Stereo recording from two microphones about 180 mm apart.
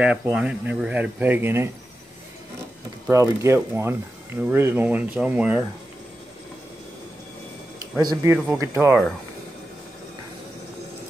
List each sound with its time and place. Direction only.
0.0 s speech: 5° right (ahead or behind)
3.1 s speech: 15° right (ahead or behind)
8.0 s speech: 20° right (ahead or behind)